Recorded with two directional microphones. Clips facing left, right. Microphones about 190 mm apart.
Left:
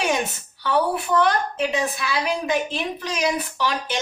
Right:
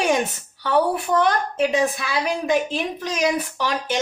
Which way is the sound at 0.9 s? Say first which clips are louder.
Even; 45° right (ahead or behind).